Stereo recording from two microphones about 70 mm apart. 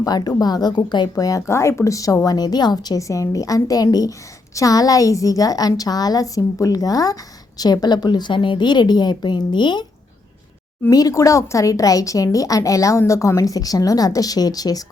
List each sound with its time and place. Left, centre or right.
0.0 s a woman's voice: left
1.1 s speech: left
7.6 s a woman's voice: left
10.9 s speech: left